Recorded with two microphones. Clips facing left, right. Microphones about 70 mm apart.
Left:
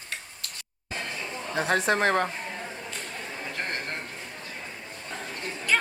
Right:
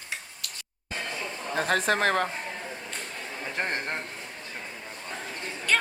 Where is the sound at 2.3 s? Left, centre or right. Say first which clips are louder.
Even; centre.